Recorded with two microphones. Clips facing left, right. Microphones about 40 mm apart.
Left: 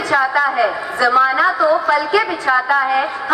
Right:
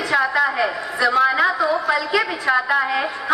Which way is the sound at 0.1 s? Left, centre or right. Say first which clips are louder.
Left 3 dB; centre.